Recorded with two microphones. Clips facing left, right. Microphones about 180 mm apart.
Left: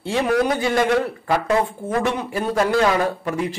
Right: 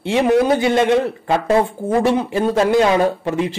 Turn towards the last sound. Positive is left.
turn(degrees=-25)  # may be behind; listen again after turning